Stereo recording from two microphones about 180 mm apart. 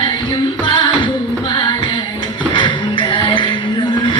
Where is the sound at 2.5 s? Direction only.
30° left (ahead or behind).